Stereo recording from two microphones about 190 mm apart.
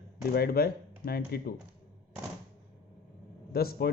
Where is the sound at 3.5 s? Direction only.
55° left (ahead or behind).